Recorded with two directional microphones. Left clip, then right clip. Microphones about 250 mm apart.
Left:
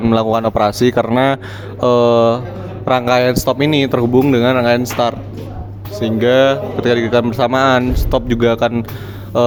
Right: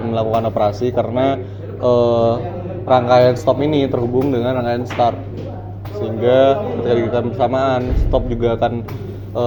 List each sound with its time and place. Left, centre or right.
0.1 s speech: left